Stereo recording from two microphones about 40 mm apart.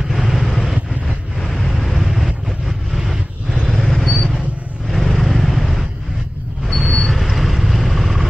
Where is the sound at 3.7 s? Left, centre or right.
Centre.